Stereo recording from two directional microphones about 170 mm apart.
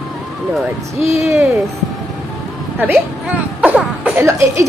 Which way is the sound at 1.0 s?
15° right (ahead or behind).